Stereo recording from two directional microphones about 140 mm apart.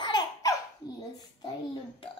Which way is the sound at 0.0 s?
30° left (ahead or behind).